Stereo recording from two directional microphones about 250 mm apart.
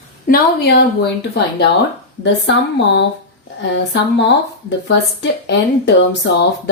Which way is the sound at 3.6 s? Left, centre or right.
Left.